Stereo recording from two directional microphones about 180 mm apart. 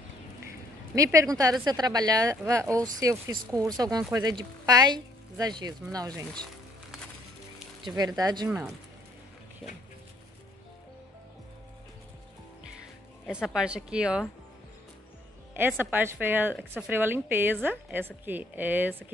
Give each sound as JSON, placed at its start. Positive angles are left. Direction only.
{"t": 0.9, "sound": "speech", "side_deg": -15}
{"t": 7.8, "sound": "a woman's voice", "side_deg": -20}
{"t": 13.3, "sound": "speech", "side_deg": -5}
{"t": 15.8, "sound": "a woman's voice", "side_deg": -10}
{"t": 16.5, "sound": "speech", "side_deg": 5}
{"t": 16.9, "sound": "a woman's voice", "side_deg": -10}